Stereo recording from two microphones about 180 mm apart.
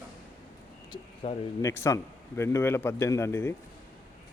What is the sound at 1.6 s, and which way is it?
A man's voice, 15° left (ahead or behind).